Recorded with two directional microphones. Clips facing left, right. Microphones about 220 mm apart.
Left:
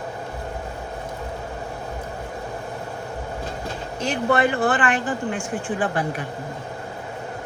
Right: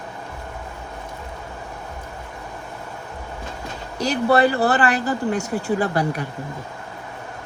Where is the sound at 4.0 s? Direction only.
35° right (ahead or behind).